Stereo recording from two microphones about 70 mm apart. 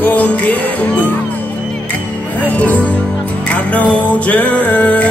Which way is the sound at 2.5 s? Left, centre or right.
Centre.